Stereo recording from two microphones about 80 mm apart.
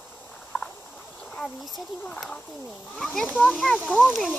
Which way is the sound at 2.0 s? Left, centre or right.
Centre.